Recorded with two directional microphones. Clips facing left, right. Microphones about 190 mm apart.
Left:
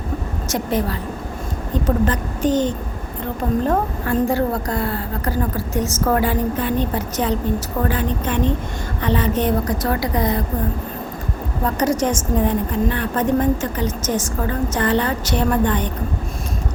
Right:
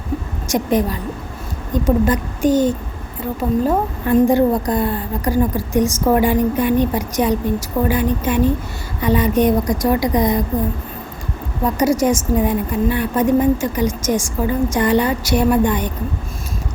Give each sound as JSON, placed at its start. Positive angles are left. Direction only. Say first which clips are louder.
{"t": 0.4, "sound": "a woman's voice", "louder": "right 4 dB", "side_deg": -15}
{"t": 11.6, "sound": "a woman's voice", "louder": "right 3 dB", "side_deg": -10}